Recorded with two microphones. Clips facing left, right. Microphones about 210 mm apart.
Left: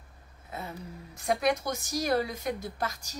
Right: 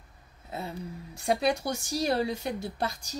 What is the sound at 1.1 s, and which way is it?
Speech, 30° right (ahead or behind).